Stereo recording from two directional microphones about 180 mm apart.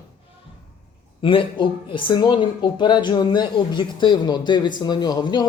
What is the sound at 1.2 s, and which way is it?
Speech, 30° left (ahead or behind).